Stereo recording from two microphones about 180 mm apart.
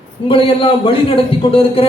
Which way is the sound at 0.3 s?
30° left (ahead or behind).